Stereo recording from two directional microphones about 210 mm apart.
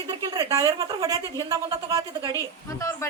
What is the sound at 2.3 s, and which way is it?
Speech, 15° left (ahead or behind).